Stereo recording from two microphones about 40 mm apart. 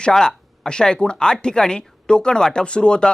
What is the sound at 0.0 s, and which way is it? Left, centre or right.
Speech, centre.